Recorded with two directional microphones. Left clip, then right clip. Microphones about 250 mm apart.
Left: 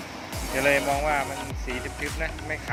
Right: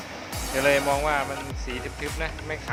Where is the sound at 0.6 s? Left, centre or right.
Centre.